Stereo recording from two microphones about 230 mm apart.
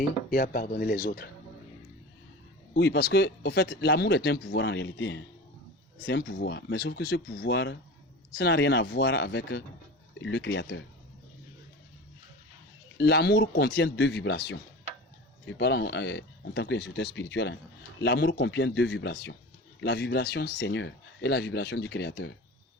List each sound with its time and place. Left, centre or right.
0.0 s speech: left
2.7 s speech: left
13.0 s speech: left